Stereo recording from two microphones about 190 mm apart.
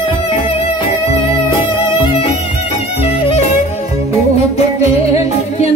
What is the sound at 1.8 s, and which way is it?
Music, 30° left (ahead or behind).